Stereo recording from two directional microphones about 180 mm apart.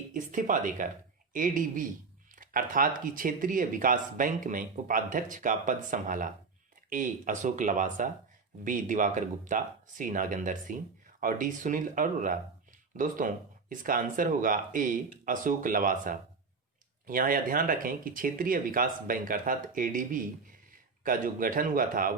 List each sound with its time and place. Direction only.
0.1 s speech: 45° right (ahead or behind)